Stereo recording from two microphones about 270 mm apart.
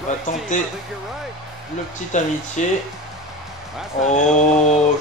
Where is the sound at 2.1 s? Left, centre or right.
Left.